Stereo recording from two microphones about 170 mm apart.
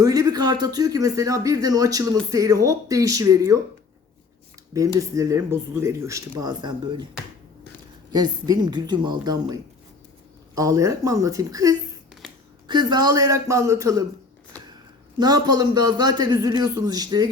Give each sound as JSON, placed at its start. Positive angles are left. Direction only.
{"t": 0.0, "sound": "speech", "side_deg": -20}
{"t": 4.9, "sound": "speech", "side_deg": -20}
{"t": 8.1, "sound": "speech", "side_deg": -25}
{"t": 15.2, "sound": "speech", "side_deg": -25}